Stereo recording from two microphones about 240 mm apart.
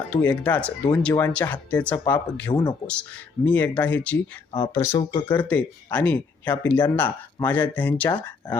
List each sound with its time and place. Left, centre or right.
0.1 s speech: centre
2.5 s speech: centre
2.8 s speech: centre
4.5 s speech: left